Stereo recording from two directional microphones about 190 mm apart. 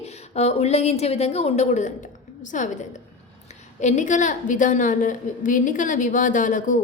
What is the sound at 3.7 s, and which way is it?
A woman's voice, 40° left (ahead or behind).